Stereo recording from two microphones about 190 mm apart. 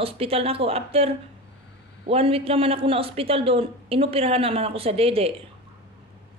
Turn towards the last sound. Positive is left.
turn(degrees=-30)  # may be behind; listen again after turning